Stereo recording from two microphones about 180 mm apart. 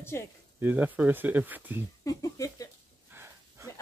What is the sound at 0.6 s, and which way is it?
Speech, 10° right (ahead or behind).